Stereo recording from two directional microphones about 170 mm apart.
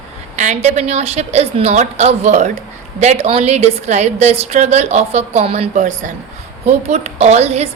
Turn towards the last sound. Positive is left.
turn(degrees=-40)  # may be behind; listen again after turning